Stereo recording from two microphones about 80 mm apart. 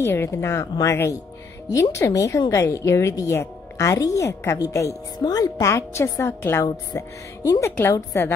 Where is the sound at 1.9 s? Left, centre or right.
Left.